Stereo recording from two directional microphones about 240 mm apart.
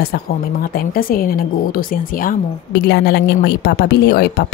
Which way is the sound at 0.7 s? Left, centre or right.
Left.